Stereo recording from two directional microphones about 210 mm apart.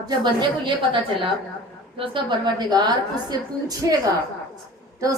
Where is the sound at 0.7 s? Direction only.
25° right (ahead or behind).